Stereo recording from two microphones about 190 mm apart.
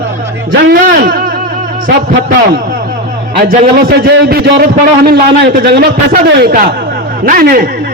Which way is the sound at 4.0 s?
55° right (ahead or behind).